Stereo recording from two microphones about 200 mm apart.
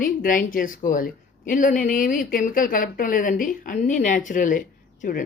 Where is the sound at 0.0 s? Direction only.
45° left (ahead or behind).